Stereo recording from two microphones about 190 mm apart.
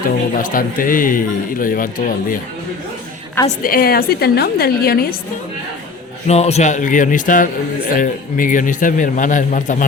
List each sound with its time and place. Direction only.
0.3 s speech: 45° left (ahead or behind)
3.6 s speech: 50° left (ahead or behind)
6.2 s speech: 35° left (ahead or behind)